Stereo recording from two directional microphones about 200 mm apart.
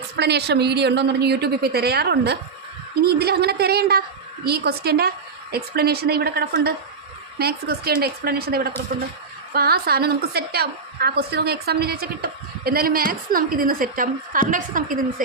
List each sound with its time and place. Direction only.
0.2 s a woman's voice: 55° right (ahead or behind)